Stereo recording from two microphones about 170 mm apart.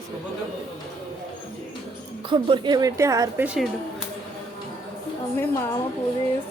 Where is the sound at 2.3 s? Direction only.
30° right (ahead or behind).